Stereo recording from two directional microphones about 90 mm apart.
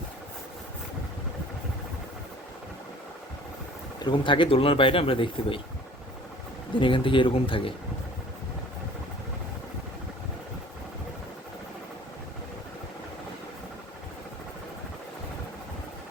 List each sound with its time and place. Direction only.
4.0 s speech: 60° left (ahead or behind); by 5.5 s 75° left (ahead or behind)
6.7 s speech: 70° left (ahead or behind)